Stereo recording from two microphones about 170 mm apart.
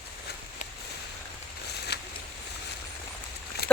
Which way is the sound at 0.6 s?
45° left (ahead or behind).